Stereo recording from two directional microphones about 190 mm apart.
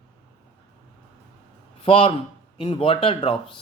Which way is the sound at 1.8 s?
30° left (ahead or behind).